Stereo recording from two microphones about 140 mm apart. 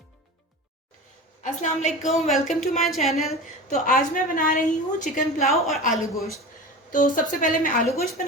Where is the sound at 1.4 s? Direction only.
60° left (ahead or behind).